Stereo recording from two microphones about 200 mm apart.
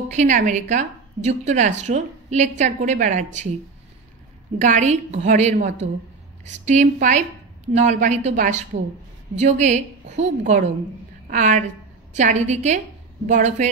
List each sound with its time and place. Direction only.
0.1 s a woman's voice: 35° right (ahead or behind)
4.6 s a woman's voice: 40° right (ahead or behind)